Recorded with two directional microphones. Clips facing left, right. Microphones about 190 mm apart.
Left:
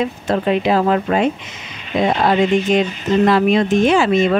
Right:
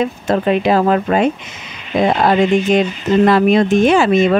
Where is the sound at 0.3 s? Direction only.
50° right (ahead or behind).